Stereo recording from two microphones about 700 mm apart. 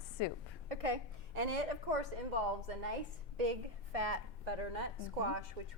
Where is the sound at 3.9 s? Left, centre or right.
Right.